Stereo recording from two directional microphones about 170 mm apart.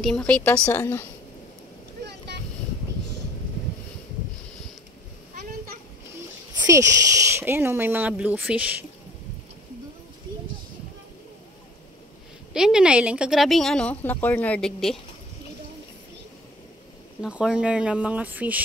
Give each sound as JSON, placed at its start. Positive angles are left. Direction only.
{"t": 0.0, "sound": "a woman's voice", "side_deg": 5}
{"t": 2.0, "sound": "boat", "side_deg": -80}
{"t": 6.6, "sound": "speech", "side_deg": -20}
{"t": 12.5, "sound": "a woman's voice", "side_deg": -5}
{"t": 17.2, "sound": "speech", "side_deg": -5}